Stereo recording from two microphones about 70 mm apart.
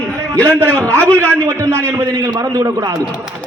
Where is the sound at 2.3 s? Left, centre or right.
Right.